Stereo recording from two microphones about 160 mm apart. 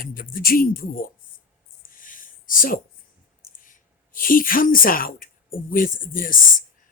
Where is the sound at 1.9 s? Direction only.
55° left (ahead or behind).